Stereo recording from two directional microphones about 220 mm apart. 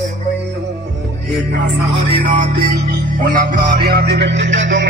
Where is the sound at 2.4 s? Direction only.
40° right (ahead or behind).